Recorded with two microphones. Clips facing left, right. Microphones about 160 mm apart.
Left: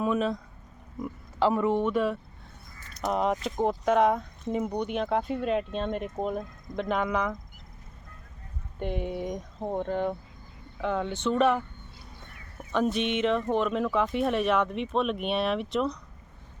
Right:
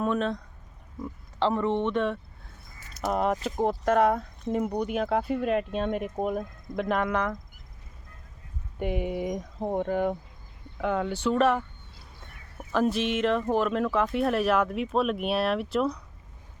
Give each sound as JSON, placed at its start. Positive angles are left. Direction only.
{"t": 0.0, "sound": "speech", "side_deg": 0}
{"t": 8.8, "sound": "speech", "side_deg": -5}
{"t": 12.7, "sound": "speech", "side_deg": 0}